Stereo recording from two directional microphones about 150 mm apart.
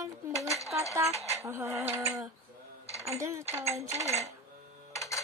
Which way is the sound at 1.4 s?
15° right (ahead or behind).